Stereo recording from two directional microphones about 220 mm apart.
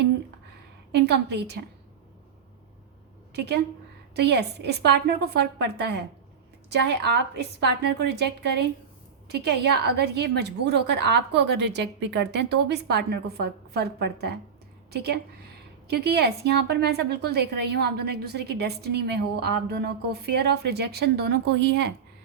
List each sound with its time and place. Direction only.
0.9 s a woman's voice: 50° right (ahead or behind)
3.3 s a woman's voice: 50° right (ahead or behind)